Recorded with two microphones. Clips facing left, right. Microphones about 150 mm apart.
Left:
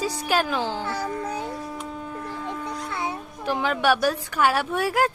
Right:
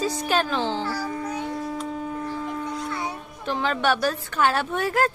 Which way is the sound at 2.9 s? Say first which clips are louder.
Left 1 dB; 25° left (ahead or behind).